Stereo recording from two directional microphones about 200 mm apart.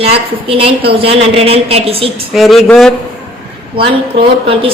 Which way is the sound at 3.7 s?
25° right (ahead or behind).